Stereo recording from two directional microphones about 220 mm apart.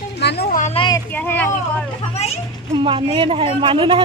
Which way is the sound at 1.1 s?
5° left (ahead or behind).